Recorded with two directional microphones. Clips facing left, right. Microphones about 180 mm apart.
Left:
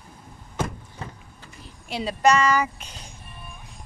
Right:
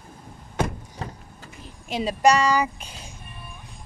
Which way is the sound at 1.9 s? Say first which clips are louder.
Right 1 dB; 15° right (ahead or behind).